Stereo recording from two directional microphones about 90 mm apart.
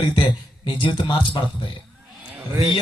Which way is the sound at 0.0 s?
60° left (ahead or behind).